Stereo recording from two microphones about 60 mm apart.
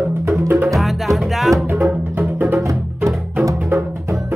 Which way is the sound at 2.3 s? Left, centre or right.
Right.